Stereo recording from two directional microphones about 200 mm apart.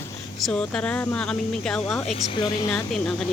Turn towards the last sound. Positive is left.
turn(degrees=0)  # may be behind; listen again after turning